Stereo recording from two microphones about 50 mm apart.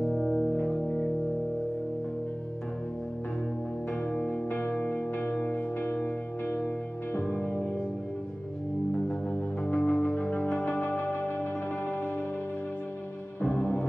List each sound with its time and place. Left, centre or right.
0.0 s music: left
4.1 s music: left
4.5 s music: left
7.2 s music: left
8.9 s music: left
13.4 s music: left